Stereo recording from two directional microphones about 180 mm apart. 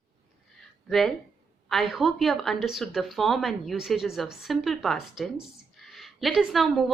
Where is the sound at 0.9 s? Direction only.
Centre (ahead or behind).